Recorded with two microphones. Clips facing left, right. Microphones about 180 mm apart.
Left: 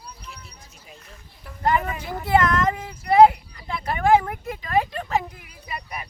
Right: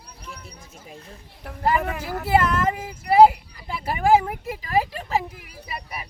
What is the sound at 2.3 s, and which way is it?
Speech, 10° right (ahead or behind).